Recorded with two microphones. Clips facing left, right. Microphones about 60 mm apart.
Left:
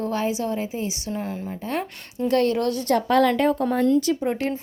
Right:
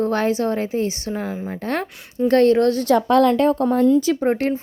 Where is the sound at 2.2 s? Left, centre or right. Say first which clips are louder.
Right 6 dB; right.